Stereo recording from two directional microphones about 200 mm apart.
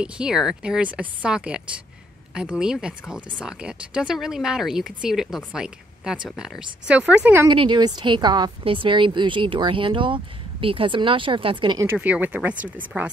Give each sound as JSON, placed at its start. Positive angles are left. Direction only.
{"t": 0.0, "sound": "speech", "side_deg": -5}
{"t": 7.4, "sound": "a woman's voice", "side_deg": -25}
{"t": 11.8, "sound": "speech", "side_deg": -10}